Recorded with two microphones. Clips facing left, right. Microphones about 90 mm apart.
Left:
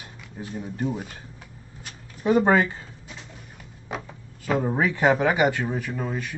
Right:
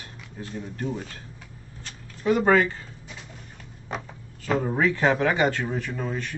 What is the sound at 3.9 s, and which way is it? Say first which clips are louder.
Speech: even; 5° left (ahead or behind).